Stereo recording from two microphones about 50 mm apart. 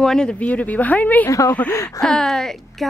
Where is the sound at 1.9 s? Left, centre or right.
Centre.